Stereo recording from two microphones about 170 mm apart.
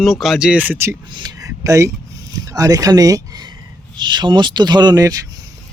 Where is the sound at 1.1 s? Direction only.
25° right (ahead or behind).